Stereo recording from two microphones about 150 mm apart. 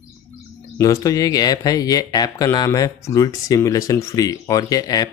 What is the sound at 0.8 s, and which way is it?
Speech, 25° left (ahead or behind).